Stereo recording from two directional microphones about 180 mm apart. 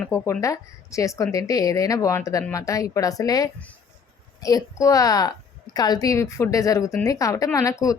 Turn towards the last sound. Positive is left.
turn(degrees=20)  # may be behind; listen again after turning